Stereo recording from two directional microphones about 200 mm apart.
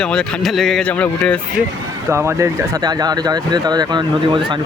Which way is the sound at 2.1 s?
15° right (ahead or behind).